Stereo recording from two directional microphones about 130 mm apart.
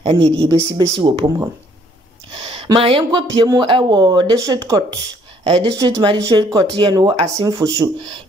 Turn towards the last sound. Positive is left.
turn(degrees=-25)  # may be behind; listen again after turning